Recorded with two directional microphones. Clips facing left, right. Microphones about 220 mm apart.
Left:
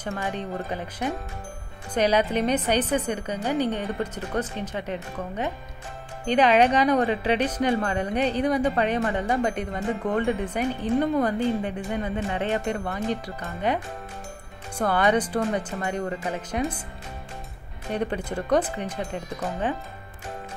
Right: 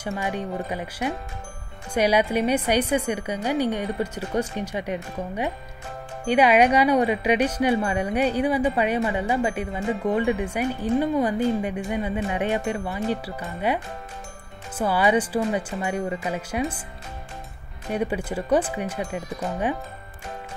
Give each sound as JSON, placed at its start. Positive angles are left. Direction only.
{"t": 0.0, "sound": "speech", "side_deg": -10}
{"t": 14.8, "sound": "speech", "side_deg": -5}
{"t": 17.9, "sound": "speech", "side_deg": -10}